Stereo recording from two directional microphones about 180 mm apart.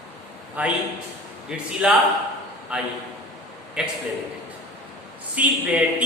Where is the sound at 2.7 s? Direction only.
5° right (ahead or behind).